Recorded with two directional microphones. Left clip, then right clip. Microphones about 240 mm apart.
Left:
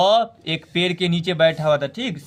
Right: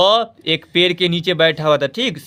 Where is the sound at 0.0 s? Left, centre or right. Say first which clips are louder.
Right 3 dB; right.